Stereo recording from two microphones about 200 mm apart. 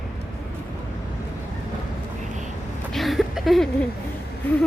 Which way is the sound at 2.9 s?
Centre (ahead or behind).